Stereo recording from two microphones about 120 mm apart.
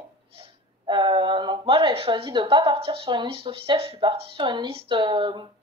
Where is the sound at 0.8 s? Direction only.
40° right (ahead or behind).